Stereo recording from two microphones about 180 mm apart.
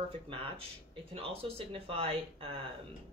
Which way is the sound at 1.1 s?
30° right (ahead or behind).